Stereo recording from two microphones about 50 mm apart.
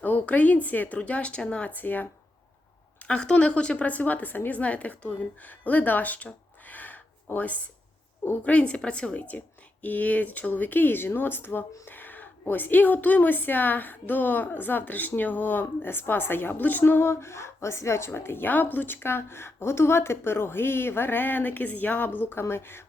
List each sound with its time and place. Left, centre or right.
0.0 s a woman's voice: left
1.7 s a woman's voice: left
3.0 s a woman's voice: left
6.7 s gasp: left
8.4 s a woman's voice: left